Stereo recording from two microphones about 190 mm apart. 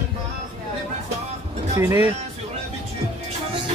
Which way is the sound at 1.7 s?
15° right (ahead or behind).